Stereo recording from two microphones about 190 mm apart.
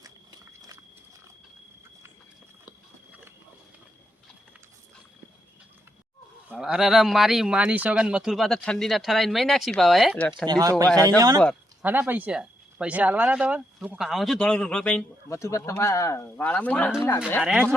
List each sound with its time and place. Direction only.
0.0 s a sound: 20° right (ahead or behind)
6.5 s speech: centre (ahead or behind)
10.4 s speech: 20° right (ahead or behind); by 15.0 s 5° left (ahead or behind)
15.3 s speech: 15° left (ahead or behind)
17.4 s speech: 5° right (ahead or behind)